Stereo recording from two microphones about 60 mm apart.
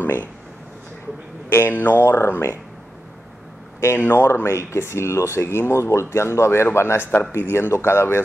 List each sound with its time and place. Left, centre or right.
0.0 s speech: left
1.5 s speech: left
2.0 s a man's voice: left
4.0 s speech: left
4.3 s a man's voice: left